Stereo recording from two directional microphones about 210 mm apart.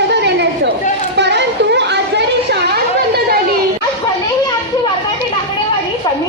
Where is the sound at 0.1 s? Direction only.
55° right (ahead or behind).